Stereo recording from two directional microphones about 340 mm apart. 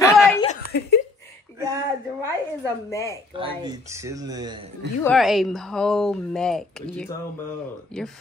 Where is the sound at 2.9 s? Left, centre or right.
Centre.